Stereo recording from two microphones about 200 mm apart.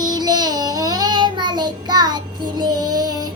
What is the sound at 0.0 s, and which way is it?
Child singing, 20° right (ahead or behind).